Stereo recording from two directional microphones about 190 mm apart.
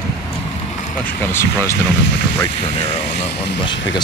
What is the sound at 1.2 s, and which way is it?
Speech, 10° left (ahead or behind).